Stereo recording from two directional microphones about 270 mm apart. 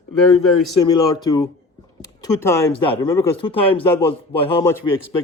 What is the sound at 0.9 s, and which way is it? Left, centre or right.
A man's voice, centre.